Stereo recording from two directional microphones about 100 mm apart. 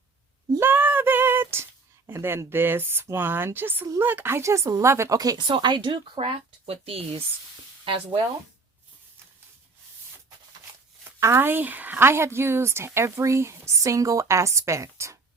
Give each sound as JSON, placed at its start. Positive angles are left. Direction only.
{"t": 0.6, "sound": "a sound", "side_deg": -20}
{"t": 2.0, "sound": "speech", "side_deg": -25}
{"t": 5.5, "sound": "speech", "side_deg": -50}
{"t": 11.2, "sound": "speech", "side_deg": -25}